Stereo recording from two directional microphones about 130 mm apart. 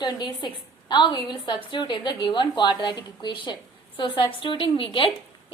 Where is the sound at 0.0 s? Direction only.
35° left (ahead or behind).